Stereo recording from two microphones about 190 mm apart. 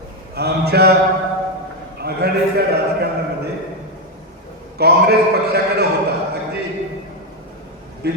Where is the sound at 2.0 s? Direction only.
55° right (ahead or behind).